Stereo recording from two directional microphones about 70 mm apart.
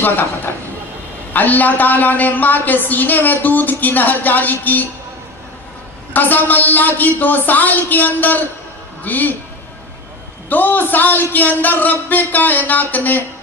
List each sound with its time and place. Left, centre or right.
1.3 s a woman's voice: left
6.1 s a woman's voice: left
10.5 s a woman's voice: left